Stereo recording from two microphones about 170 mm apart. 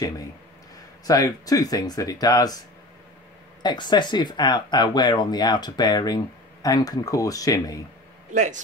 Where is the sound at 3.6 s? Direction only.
25° left (ahead or behind).